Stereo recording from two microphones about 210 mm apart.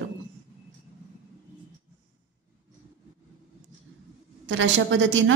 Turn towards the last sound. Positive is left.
turn(degrees=-65)  # may be behind; listen again after turning